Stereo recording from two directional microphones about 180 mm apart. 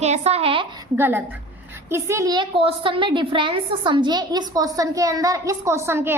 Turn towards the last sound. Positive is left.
turn(degrees=-10)  # may be behind; listen again after turning